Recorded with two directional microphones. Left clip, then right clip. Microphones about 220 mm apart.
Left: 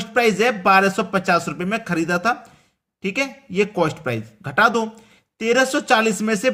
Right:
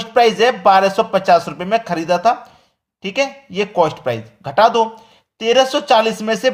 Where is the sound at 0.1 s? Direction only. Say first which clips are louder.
Right 5 dB; 15° left (ahead or behind).